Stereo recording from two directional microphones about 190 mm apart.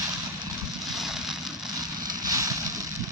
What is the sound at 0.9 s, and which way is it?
Vehicle, centre (ahead or behind).